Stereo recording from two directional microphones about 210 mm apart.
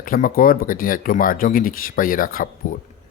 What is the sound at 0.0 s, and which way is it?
Speech, 40° left (ahead or behind).